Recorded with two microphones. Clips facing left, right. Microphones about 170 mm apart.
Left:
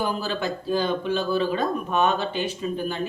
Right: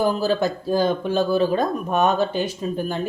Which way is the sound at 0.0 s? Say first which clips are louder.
Right 6 dB; 40° right (ahead or behind).